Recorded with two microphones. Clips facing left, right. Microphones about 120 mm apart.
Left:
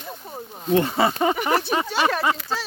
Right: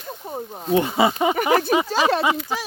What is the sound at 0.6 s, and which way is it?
Speech, 10° right (ahead or behind).